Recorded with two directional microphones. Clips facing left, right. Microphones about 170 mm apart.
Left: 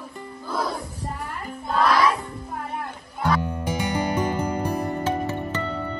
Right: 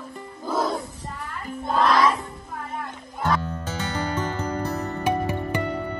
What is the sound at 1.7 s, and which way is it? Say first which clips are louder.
Child singing: even; centre (ahead or behind).